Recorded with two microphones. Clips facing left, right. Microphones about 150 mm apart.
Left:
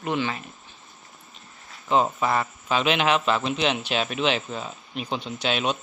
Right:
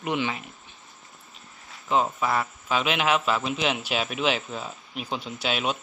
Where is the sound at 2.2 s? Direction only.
Centre (ahead or behind).